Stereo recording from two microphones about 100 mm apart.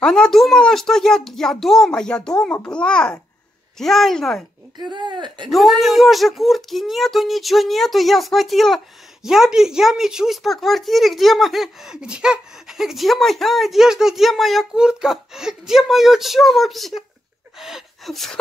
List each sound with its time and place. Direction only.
0.0 s a child's voice: 5° left (ahead or behind)
4.7 s speech: 50° right (ahead or behind)
5.5 s speech: centre (ahead or behind)